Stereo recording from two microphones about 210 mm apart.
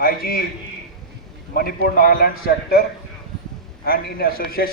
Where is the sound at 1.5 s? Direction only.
45° left (ahead or behind).